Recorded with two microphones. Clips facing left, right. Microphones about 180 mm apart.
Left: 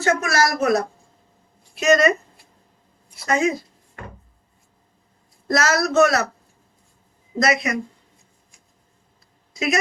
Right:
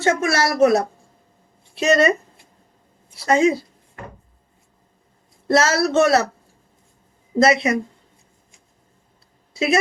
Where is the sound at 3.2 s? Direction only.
30° right (ahead or behind).